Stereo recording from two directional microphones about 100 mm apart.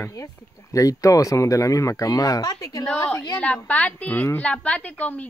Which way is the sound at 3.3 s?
10° left (ahead or behind).